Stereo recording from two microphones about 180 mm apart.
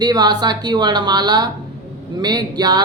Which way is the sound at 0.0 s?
25° right (ahead or behind).